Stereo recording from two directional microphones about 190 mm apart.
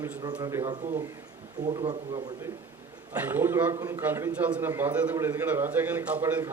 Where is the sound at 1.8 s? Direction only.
25° right (ahead or behind).